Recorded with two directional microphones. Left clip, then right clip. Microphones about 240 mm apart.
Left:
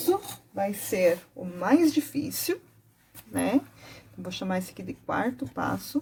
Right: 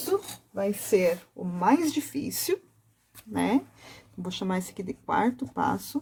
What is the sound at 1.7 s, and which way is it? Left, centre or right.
Speech, right.